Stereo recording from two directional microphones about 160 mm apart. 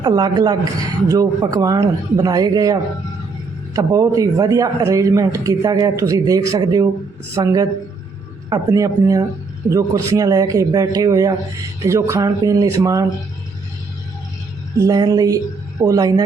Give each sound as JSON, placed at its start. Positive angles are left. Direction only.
{"t": 0.0, "sound": "speech", "side_deg": -25}
{"t": 3.8, "sound": "speech", "side_deg": -20}
{"t": 14.8, "sound": "speech", "side_deg": -25}